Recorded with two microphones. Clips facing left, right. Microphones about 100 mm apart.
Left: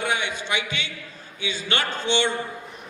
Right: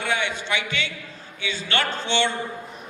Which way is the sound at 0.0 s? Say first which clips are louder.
Right 1 dB; 15° left (ahead or behind).